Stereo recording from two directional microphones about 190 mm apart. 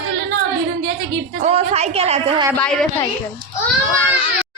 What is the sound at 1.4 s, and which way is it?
A woman's voice, 35° right (ahead or behind).